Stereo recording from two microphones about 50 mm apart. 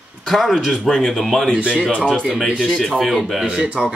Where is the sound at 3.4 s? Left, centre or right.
Centre.